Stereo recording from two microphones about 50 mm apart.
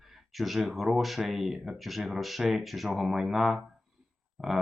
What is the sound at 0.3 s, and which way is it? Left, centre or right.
Speech, centre.